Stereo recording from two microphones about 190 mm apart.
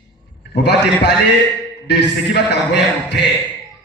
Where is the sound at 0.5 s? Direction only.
65° left (ahead or behind).